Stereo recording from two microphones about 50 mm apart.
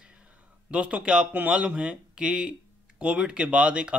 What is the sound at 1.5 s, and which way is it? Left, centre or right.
Speech, centre.